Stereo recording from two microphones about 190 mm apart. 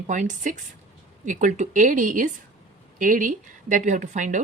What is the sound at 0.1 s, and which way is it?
A woman's voice, 40° right (ahead or behind).